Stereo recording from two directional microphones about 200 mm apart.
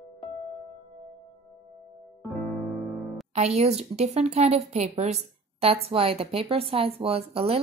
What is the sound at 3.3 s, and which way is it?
A woman's voice, 35° right (ahead or behind).